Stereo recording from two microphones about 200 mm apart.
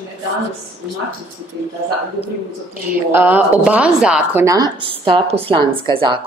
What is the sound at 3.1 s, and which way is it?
A woman's voice, 10° right (ahead or behind).